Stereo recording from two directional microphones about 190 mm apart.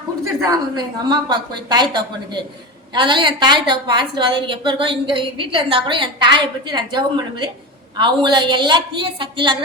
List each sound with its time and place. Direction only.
0.4 s a woman's voice: 20° right (ahead or behind)